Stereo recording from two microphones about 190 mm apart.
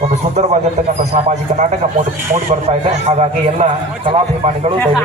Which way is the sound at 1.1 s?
40° right (ahead or behind).